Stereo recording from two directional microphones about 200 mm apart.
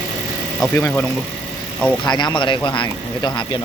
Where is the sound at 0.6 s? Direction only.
10° left (ahead or behind).